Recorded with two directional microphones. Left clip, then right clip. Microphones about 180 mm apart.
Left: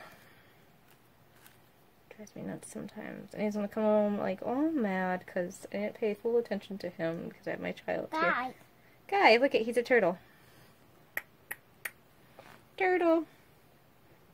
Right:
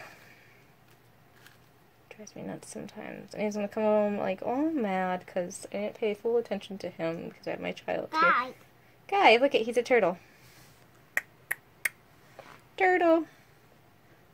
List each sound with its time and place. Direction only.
2.3 s speech: 15° left (ahead or behind)
8.2 s a child's voice: 55° left (ahead or behind)
9.0 s speech: 10° left (ahead or behind)
11.1 s finger snapping: 15° right (ahead or behind)
12.7 s speech: centre (ahead or behind)